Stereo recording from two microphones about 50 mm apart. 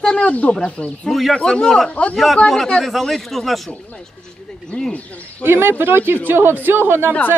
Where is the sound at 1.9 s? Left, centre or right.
Left.